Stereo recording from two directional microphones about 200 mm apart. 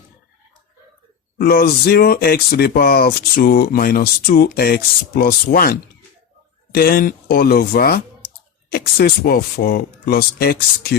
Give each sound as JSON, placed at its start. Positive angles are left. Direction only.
{"t": 1.4, "sound": "speech", "side_deg": 50}
{"t": 6.7, "sound": "speech", "side_deg": 45}